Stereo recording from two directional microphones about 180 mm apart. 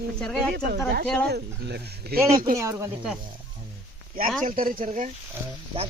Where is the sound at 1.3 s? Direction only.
65° right (ahead or behind).